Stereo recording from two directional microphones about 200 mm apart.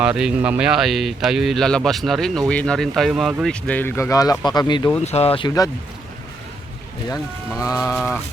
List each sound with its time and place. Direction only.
0.0 s speech: 5° right (ahead or behind); by 4.9 s 20° left (ahead or behind)
5.0 s speech: 30° left (ahead or behind)
5.5 s speech: 20° left (ahead or behind)
7.6 s speech: 15° left (ahead or behind)